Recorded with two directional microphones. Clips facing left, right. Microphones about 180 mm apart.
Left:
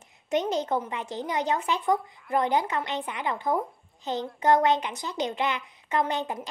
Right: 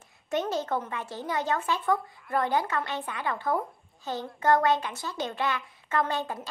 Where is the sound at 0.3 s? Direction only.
15° left (ahead or behind).